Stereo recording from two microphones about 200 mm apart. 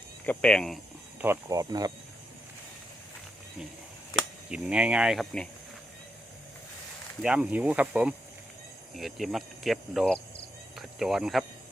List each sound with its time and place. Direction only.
0.3 s cricket: 5° left (ahead or behind)
1.2 s speech: 15° right (ahead or behind)
4.4 s cricket: 5° right (ahead or behind)
7.2 s speech: 5° right (ahead or behind)
9.0 s cricket: centre (ahead or behind)
10.8 s speech: centre (ahead or behind)